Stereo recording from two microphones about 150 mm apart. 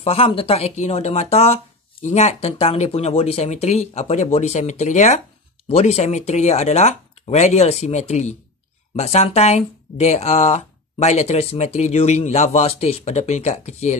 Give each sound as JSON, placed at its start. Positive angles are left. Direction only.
{"t": 0.0, "sound": "speech", "side_deg": 40}